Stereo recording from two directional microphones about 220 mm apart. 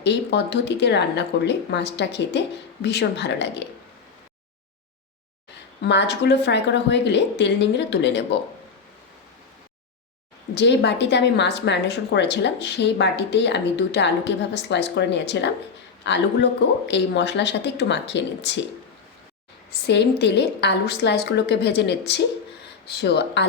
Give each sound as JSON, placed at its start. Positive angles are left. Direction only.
{"t": 0.0, "sound": "a woman's voice", "side_deg": 50}
{"t": 5.8, "sound": "a woman's voice", "side_deg": 50}
{"t": 10.5, "sound": "a woman's voice", "side_deg": 50}
{"t": 19.9, "sound": "a woman's voice", "side_deg": 50}